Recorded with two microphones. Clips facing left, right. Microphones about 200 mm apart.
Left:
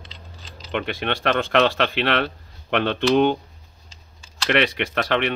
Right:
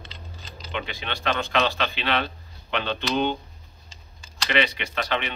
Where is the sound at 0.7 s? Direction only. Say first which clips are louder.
Left 7 dB; 60° left (ahead or behind).